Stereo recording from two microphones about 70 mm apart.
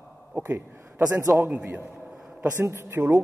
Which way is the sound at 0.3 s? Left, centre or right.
Right.